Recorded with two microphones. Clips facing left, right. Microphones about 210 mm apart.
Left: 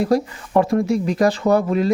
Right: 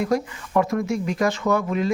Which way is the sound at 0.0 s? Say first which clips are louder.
Left 4 dB; 35° left (ahead or behind).